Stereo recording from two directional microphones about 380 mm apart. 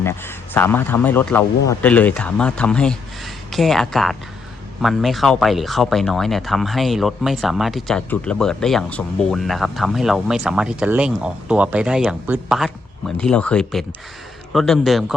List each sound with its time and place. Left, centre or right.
0.0 s speech: centre